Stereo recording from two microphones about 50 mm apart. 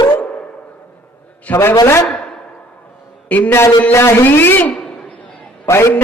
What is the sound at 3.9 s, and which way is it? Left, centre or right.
Music, left.